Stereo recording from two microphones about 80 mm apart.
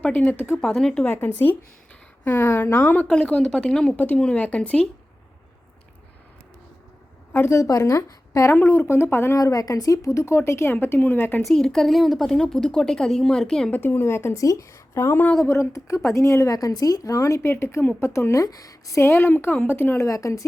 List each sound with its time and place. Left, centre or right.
0.0 s speech: centre
1.0 s a woman's voice: left
3.1 s speech: centre
7.3 s speech: left
7.6 s speech: left
9.4 s speech: left
11.4 s speech: centre
13.7 s speech: left
16.6 s speech: left
17.5 s a woman's voice: left
19.0 s a woman's voice: left
20.1 s speech: left